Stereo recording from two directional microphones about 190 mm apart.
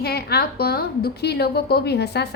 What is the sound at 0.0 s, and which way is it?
A woman's voice, 55° left (ahead or behind).